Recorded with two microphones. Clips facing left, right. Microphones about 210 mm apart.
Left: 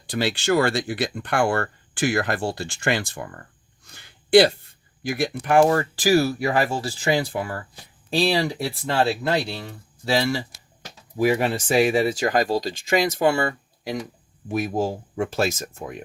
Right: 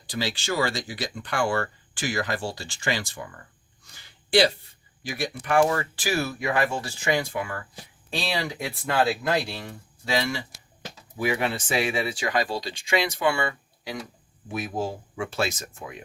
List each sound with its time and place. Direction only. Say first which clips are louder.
0.1 s speech: left 7 dB; 60° left (ahead or behind)
3.9 s a sound: left 7 dB; 55° left (ahead or behind)
5.2 s speech: left 4 dB; 50° left (ahead or behind)
5.5 s speech: left 4 dB; 40° left (ahead or behind)